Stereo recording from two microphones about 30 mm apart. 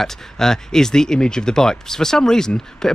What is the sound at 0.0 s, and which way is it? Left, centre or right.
Speech, centre.